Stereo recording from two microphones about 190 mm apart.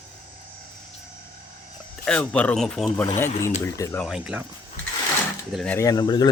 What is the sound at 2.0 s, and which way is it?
Speech, 5° left (ahead or behind).